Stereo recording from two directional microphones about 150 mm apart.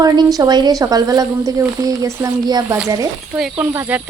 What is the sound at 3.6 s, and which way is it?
Speech, 15° right (ahead or behind).